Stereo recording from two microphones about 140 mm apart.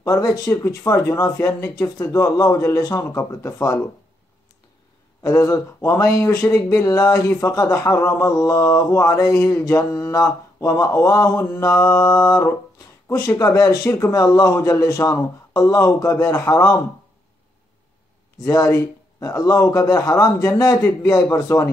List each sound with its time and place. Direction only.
0.0 s speech: 25° left (ahead or behind)
5.2 s speech: 20° left (ahead or behind)
18.4 s speech: 25° left (ahead or behind)